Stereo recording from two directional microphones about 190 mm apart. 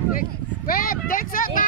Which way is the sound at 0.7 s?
50° left (ahead or behind).